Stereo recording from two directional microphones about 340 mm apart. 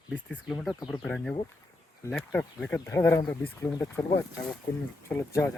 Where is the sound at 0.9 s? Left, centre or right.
Centre.